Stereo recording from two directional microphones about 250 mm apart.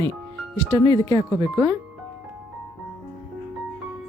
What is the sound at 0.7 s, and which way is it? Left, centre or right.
A woman's voice, centre.